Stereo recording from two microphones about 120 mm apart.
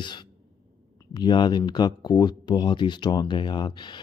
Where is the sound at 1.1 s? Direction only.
40° left (ahead or behind).